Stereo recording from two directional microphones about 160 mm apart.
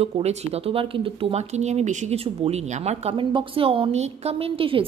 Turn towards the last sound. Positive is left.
turn(degrees=-35)  # may be behind; listen again after turning